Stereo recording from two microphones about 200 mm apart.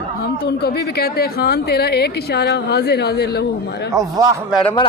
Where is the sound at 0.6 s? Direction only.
50° left (ahead or behind).